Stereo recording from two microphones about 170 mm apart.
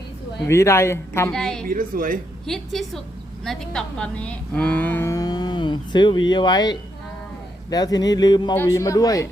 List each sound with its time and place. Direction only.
0.4 s speech: 15° left (ahead or behind)
1.3 s a woman's voice: 5° left (ahead or behind)
1.6 s a woman's voice: 55° right (ahead or behind)
2.5 s a woman's voice: centre (ahead or behind); by 9.2 s 20° left (ahead or behind)